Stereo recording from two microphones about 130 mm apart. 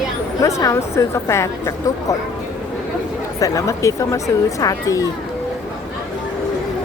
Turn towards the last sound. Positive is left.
turn(degrees=25)  # may be behind; listen again after turning